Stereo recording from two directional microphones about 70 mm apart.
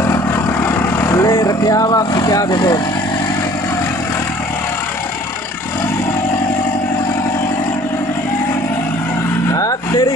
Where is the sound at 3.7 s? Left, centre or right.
Left.